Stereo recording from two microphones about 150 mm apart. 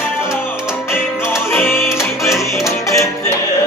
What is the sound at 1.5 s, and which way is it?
Music, 15° left (ahead or behind).